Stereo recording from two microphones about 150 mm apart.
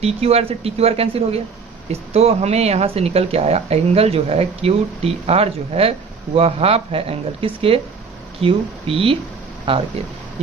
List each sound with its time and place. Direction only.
0.0 s speech: 45° right (ahead or behind)